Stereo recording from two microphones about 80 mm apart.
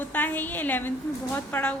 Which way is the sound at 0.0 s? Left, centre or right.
Left.